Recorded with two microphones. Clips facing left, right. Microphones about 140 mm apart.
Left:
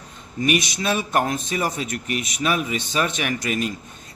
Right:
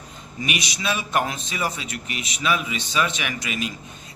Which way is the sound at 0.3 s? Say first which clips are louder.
Left 7 dB; 50° left (ahead or behind).